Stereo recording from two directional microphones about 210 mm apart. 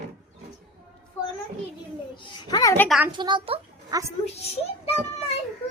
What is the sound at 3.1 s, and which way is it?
Speech, 20° right (ahead or behind).